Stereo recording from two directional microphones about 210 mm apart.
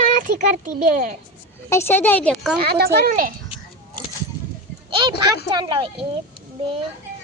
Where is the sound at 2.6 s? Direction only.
50° right (ahead or behind).